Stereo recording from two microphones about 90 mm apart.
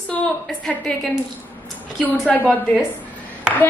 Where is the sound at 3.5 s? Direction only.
10° right (ahead or behind).